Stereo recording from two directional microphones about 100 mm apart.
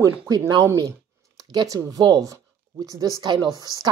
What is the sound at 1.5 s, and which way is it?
Speech, 45° right (ahead or behind).